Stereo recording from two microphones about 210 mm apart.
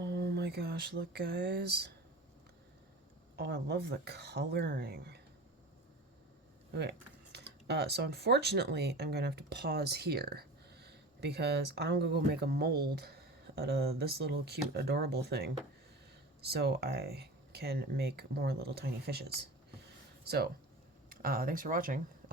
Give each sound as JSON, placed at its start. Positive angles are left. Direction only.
{"t": 0.0, "sound": "a sound", "side_deg": -50}
{"t": 3.3, "sound": "speech", "side_deg": -50}
{"t": 7.3, "sound": "speech", "side_deg": -50}